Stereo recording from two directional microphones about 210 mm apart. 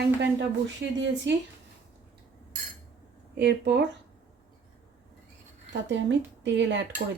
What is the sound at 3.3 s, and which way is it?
Speech, 55° right (ahead or behind).